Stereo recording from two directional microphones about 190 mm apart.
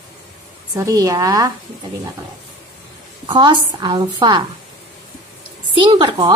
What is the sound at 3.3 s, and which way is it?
Speech, 25° right (ahead or behind).